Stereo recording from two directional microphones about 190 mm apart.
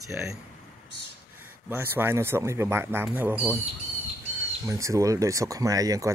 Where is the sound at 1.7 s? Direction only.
10° right (ahead or behind).